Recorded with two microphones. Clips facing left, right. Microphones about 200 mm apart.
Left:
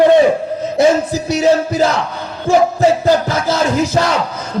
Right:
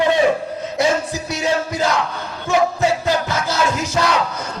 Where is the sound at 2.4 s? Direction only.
35° left (ahead or behind).